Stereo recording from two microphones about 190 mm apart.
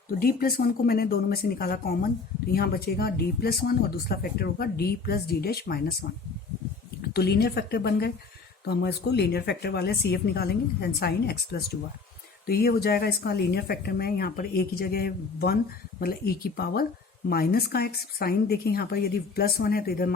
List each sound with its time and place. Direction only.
0.1 s speech: 50° left (ahead or behind)